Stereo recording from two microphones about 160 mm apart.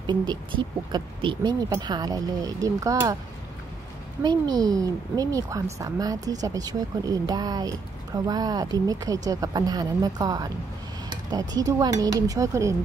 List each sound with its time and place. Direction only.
0.0 s a woman's voice: 25° right (ahead or behind)
4.2 s a woman's voice: 25° right (ahead or behind)